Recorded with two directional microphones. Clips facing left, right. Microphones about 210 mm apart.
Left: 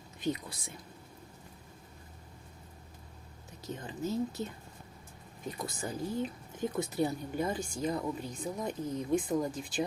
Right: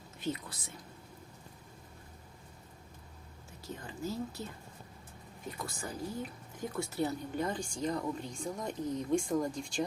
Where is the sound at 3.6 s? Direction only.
20° left (ahead or behind).